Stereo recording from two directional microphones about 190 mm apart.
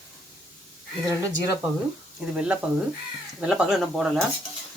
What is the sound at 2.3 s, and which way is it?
Speech, 5° right (ahead or behind).